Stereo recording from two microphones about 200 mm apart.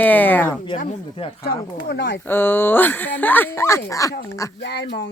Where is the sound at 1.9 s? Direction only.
60° left (ahead or behind).